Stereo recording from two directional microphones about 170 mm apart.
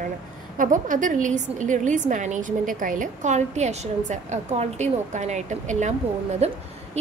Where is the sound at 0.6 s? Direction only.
50° right (ahead or behind).